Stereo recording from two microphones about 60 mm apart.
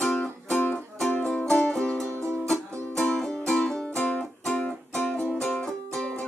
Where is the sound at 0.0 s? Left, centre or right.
Centre.